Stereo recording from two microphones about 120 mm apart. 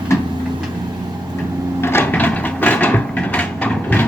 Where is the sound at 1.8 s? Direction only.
15° left (ahead or behind).